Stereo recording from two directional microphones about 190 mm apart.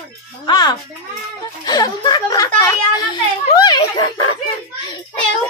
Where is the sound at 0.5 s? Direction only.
20° left (ahead or behind).